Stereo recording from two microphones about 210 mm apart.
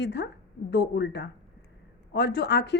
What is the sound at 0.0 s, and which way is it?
A woman's voice, 55° left (ahead or behind).